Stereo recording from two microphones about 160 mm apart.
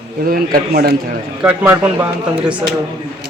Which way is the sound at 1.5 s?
10° right (ahead or behind).